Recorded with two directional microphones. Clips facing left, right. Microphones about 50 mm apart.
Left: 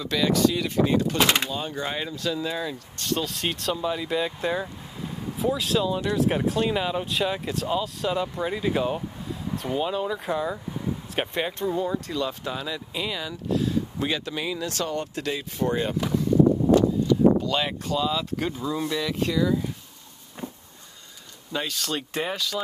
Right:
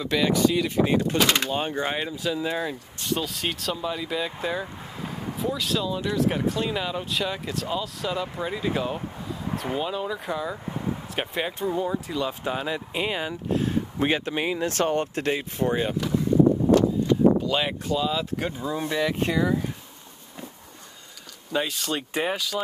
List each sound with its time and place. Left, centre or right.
0.0 s speech: centre
0.8 s speech: centre
1.1 s speech: centre
1.5 s speech: right
3.1 s speech: centre
12.4 s speech: right
15.6 s speech: centre
17.5 s speech: centre
18.6 s speech: right
21.5 s speech: centre